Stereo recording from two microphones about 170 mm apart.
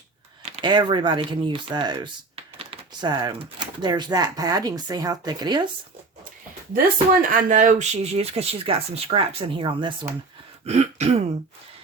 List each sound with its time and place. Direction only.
0.4 s speech: 30° right (ahead or behind)
7.1 s speech: 55° right (ahead or behind); by 10.1 s 30° right (ahead or behind)
10.7 s speech: 40° right (ahead or behind)